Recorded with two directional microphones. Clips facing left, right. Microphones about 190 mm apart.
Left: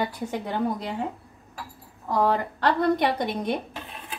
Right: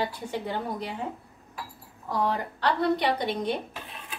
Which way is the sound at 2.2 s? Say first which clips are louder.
Left 4 dB; 50° left (ahead or behind).